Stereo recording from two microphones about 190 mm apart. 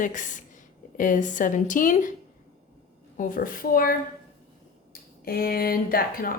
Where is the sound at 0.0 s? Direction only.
40° left (ahead or behind).